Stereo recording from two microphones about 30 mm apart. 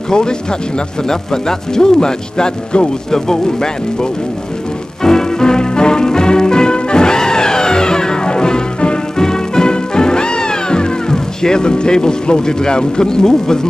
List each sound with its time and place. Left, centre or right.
0.1 s speech: left
5.0 s music: left